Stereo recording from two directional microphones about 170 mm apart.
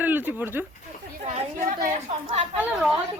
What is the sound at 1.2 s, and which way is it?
Speech, 45° right (ahead or behind).